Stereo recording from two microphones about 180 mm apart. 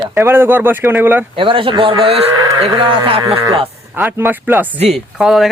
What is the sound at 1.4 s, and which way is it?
Speech, 30° right (ahead or behind).